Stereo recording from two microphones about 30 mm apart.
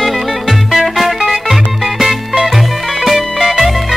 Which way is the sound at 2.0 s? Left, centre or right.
Centre.